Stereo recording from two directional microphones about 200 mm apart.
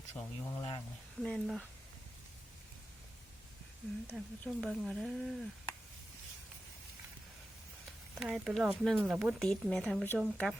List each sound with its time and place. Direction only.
0.1 s speech: 15° left (ahead or behind)
1.2 s speech: centre (ahead or behind)
4.0 s speech: centre (ahead or behind)
8.2 s speech: centre (ahead or behind)